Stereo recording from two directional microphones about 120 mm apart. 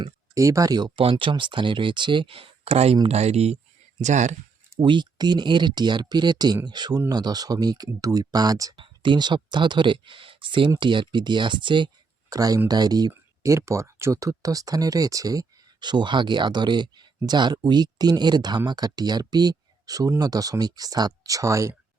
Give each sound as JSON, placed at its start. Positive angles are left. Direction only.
{"t": 0.0, "sound": "speech", "side_deg": -25}
{"t": 0.9, "sound": "speech", "side_deg": -45}
{"t": 4.0, "sound": "speech", "side_deg": -85}
{"t": 4.8, "sound": "speech", "side_deg": -40}
{"t": 8.7, "sound": "speech", "side_deg": -45}
{"t": 12.3, "sound": "speech", "side_deg": -30}